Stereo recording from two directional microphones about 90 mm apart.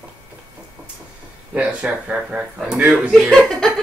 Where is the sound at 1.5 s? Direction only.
15° right (ahead or behind).